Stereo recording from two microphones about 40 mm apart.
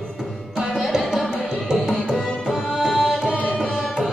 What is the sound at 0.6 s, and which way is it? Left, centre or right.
Music, centre.